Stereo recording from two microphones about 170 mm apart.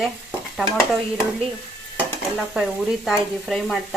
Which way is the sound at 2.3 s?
Centre (ahead or behind).